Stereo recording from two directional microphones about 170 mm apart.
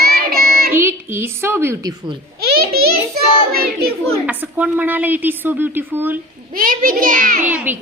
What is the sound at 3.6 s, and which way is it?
Speech, 65° right (ahead or behind).